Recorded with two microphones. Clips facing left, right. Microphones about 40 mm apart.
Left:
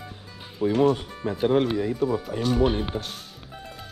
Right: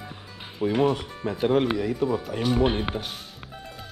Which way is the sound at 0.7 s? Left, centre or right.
Right.